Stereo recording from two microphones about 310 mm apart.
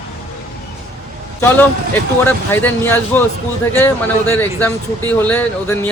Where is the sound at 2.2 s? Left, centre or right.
Centre.